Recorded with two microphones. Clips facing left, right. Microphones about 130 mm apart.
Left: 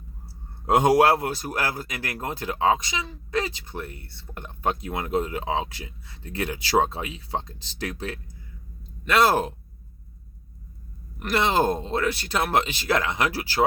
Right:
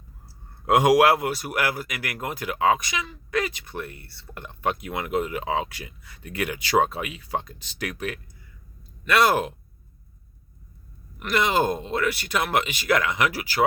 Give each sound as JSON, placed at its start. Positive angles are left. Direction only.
{"t": 0.7, "sound": "speech", "side_deg": 30}
{"t": 11.2, "sound": "speech", "side_deg": 35}